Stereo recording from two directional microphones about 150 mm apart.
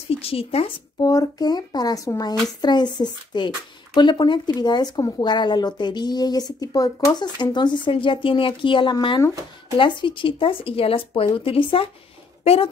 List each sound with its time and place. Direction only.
0.2 s speech: 40° left (ahead or behind)
0.9 s speech: 25° left (ahead or behind); by 12.6 s 40° left (ahead or behind)